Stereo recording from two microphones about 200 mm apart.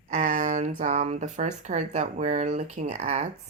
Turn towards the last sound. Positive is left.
turn(degrees=-35)  # may be behind; listen again after turning